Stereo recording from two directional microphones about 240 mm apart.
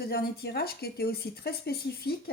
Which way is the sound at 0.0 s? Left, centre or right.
Left.